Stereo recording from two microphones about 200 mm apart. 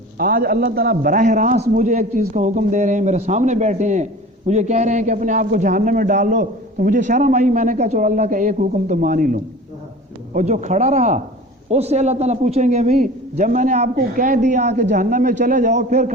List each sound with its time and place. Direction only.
0.2 s a man's voice: 45° right (ahead or behind)